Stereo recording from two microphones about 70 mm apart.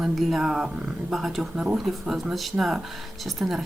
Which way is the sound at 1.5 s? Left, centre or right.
Centre.